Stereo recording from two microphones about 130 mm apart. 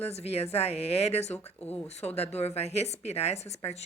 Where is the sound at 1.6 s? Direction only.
10° left (ahead or behind).